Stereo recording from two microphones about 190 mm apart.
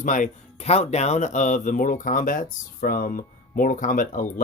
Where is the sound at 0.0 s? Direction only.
40° left (ahead or behind).